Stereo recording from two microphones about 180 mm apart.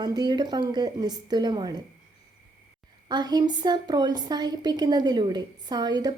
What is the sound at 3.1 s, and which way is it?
A woman's voice, 25° right (ahead or behind).